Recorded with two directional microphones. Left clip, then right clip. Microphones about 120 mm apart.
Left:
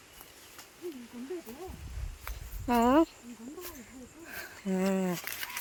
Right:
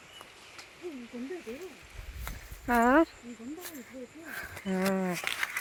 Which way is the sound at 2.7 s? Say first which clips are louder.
Right 1 dB; 35° left (ahead or behind).